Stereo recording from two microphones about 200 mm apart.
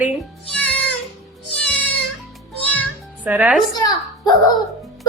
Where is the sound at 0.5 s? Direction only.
5° left (ahead or behind).